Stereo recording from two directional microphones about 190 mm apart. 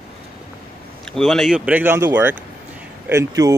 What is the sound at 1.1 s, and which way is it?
Speech, centre (ahead or behind).